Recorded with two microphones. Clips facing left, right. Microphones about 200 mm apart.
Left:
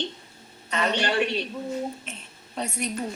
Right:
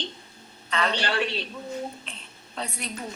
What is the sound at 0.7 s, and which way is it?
Speech, 20° left (ahead or behind).